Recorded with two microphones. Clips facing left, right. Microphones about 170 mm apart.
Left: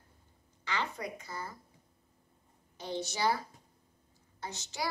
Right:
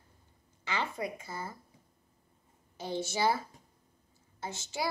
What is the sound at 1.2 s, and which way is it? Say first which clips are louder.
Speech: right 1 dB; 25° right (ahead or behind).